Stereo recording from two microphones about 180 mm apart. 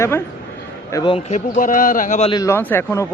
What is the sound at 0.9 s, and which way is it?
A man's voice, 25° left (ahead or behind).